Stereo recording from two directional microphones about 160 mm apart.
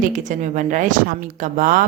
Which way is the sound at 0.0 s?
50° right (ahead or behind).